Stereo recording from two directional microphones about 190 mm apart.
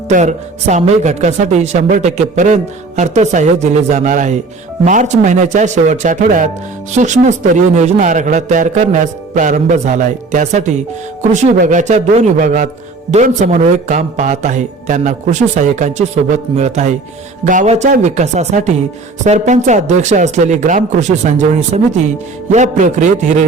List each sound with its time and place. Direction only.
0.1 s speech: 40° right (ahead or behind)